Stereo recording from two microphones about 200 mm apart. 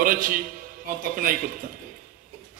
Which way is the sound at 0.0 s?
45° right (ahead or behind).